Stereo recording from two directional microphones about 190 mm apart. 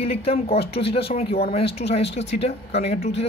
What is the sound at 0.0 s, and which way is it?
Speech, 30° left (ahead or behind).